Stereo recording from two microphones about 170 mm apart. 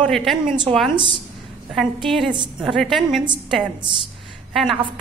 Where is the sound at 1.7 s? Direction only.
Centre (ahead or behind).